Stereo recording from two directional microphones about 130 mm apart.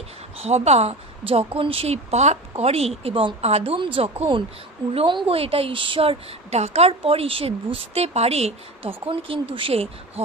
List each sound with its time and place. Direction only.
0.4 s a woman's voice: 55° right (ahead or behind)